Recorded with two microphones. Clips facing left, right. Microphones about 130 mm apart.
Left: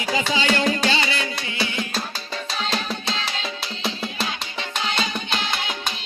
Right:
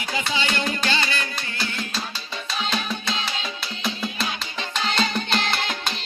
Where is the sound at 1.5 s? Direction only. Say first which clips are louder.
Left 4 dB; 75° left (ahead or behind).